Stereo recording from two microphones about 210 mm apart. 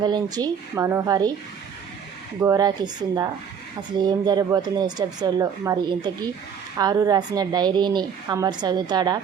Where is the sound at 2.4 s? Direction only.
20° right (ahead or behind).